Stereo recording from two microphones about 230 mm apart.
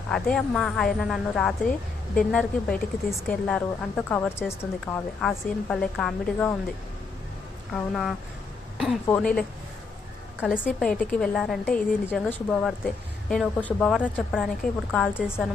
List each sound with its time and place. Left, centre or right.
0.1 s speech: centre
7.7 s speech: centre
10.6 s speech: centre